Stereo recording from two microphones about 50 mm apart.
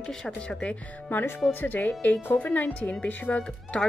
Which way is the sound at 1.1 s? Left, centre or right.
Left.